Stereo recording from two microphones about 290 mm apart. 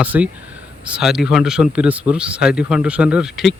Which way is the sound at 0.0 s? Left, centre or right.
Centre.